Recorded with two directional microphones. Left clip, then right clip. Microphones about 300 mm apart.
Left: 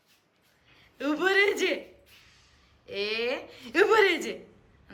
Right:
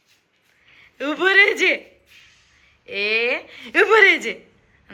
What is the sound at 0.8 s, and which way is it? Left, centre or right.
A woman's voice, centre.